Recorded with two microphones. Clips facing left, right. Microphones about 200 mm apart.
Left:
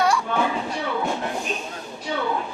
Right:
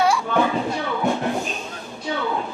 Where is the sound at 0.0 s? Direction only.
5° right (ahead or behind).